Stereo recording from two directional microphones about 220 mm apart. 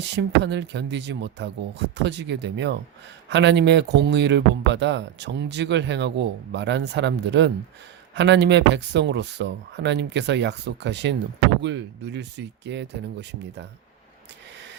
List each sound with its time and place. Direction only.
0.0 s speech: 50° right (ahead or behind)